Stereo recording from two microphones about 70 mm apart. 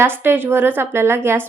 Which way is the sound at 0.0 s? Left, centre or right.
Right.